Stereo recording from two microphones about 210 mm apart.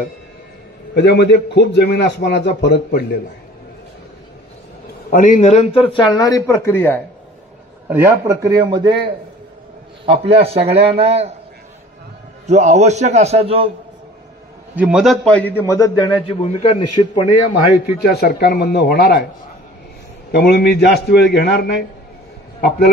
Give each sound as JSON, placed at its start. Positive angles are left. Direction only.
{"t": 0.9, "sound": "a man's voice", "side_deg": 50}
{"t": 5.1, "sound": "a man's voice", "side_deg": 35}
{"t": 7.9, "sound": "speech", "side_deg": -15}
{"t": 10.0, "sound": "a man's voice", "side_deg": -25}
{"t": 12.4, "sound": "a man's voice", "side_deg": -30}
{"t": 14.8, "sound": "a man's voice", "side_deg": -5}
{"t": 16.0, "sound": "a man's voice", "side_deg": 30}
{"t": 18.0, "sound": "a man's voice", "side_deg": 50}
{"t": 20.2, "sound": "a man's voice", "side_deg": 50}